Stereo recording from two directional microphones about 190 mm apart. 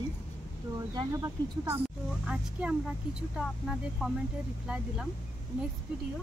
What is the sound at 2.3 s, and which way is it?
Speech, 5° right (ahead or behind).